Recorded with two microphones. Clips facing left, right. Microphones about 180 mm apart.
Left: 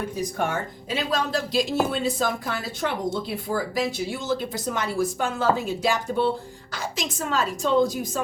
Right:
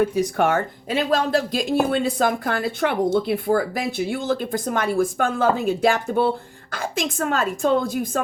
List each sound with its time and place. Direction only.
0.0 s speech: 75° right (ahead or behind)
0.9 s speech: 55° right (ahead or behind)